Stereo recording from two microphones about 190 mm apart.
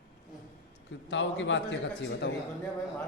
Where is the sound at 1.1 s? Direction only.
75° left (ahead or behind).